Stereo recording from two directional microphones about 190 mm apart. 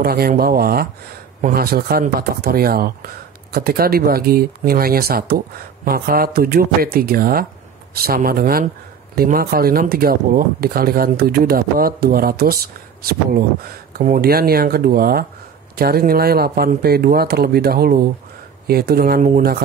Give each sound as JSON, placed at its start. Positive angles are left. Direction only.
{"t": 0.0, "sound": "speech", "side_deg": -55}
{"t": 13.9, "sound": "speech", "side_deg": -50}